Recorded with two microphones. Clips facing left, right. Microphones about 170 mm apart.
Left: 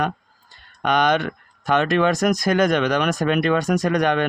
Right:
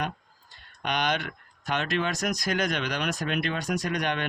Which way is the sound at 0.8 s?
50° left (ahead or behind).